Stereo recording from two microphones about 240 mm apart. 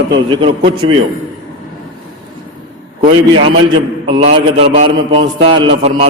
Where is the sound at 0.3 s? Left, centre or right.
Right.